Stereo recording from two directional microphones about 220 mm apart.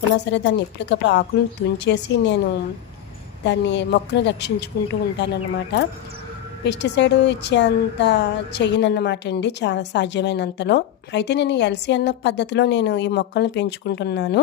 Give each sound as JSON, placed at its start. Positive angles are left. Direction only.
{"t": 0.3, "sound": "speech", "side_deg": 55}
{"t": 3.4, "sound": "speech", "side_deg": 55}